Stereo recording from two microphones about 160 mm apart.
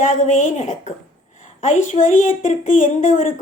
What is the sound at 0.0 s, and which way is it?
A woman's voice, 50° left (ahead or behind).